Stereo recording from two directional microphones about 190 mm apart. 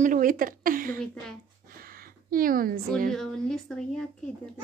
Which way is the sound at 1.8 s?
50° right (ahead or behind).